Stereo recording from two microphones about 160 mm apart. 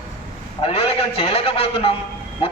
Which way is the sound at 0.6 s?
35° left (ahead or behind).